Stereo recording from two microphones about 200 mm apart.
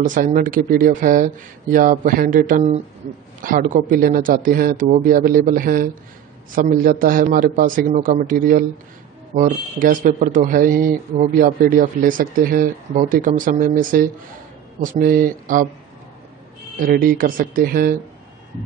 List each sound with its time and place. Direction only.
0.0 s speech: 40° right (ahead or behind)
16.7 s speech: 45° right (ahead or behind)